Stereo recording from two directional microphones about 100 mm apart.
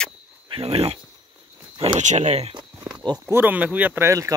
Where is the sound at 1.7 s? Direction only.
80° right.